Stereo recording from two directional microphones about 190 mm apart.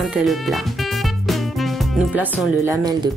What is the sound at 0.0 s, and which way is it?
Music, centre (ahead or behind).